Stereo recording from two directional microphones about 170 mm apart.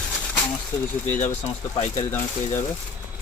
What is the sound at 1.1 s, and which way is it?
Speech, 45° left (ahead or behind).